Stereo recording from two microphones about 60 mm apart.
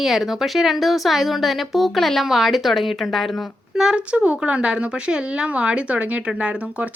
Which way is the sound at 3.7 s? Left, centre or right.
Centre.